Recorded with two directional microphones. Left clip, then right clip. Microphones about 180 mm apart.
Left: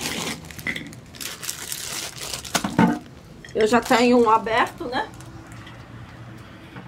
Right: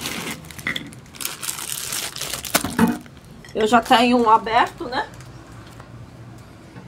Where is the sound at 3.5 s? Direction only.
10° right (ahead or behind).